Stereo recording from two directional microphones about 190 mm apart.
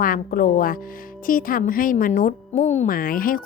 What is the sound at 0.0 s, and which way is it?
A woman's voice, 45° left (ahead or behind).